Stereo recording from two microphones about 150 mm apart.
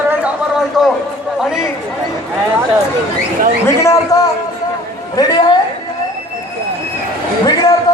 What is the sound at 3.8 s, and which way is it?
A man's voice, 25° left (ahead or behind).